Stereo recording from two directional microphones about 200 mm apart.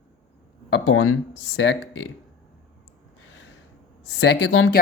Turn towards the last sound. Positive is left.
turn(degrees=70)  # may be behind; listen again after turning